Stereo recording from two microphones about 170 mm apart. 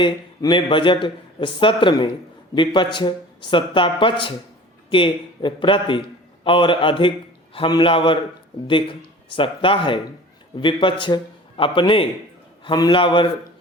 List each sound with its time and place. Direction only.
0.0 s speech: 30° left (ahead or behind)